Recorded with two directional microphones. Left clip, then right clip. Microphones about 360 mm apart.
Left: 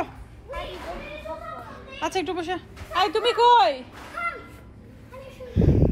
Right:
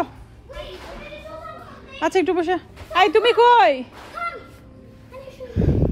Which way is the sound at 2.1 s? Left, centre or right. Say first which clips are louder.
Right 9 dB; centre.